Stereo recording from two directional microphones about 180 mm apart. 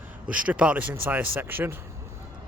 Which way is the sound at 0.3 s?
10° right (ahead or behind).